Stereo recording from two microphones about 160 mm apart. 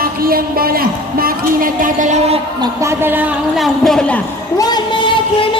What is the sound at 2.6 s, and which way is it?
A man's voice, 15° right (ahead or behind).